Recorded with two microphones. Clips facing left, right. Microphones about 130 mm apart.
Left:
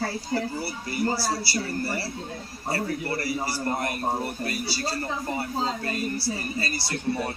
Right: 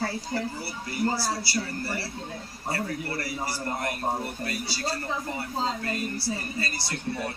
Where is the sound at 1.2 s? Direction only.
10° left (ahead or behind).